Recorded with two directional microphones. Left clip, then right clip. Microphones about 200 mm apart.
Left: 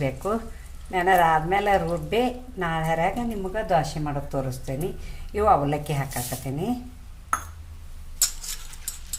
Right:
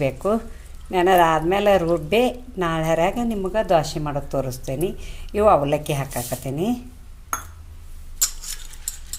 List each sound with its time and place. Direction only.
0.0 s speech: 30° right (ahead or behind)